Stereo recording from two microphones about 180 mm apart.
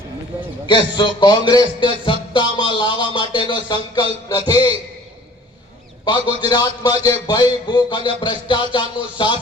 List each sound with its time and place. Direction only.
0.7 s a man's voice: 25° left (ahead or behind)
6.1 s a man's voice: 25° left (ahead or behind)